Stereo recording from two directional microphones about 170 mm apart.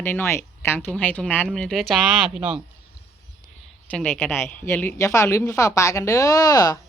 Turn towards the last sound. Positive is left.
turn(degrees=20)  # may be behind; listen again after turning